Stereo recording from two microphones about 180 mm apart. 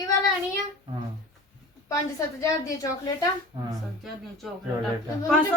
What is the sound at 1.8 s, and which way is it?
A woman's voice, 20° left (ahead or behind).